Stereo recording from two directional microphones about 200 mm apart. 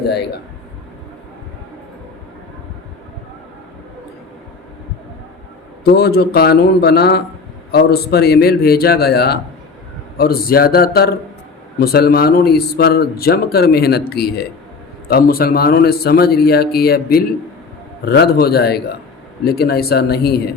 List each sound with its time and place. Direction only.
5.8 s speech: 55° left (ahead or behind)